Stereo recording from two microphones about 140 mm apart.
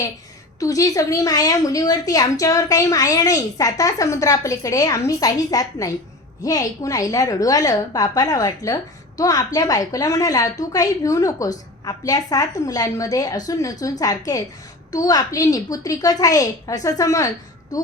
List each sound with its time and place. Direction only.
0.6 s a woman's voice: 25° left (ahead or behind)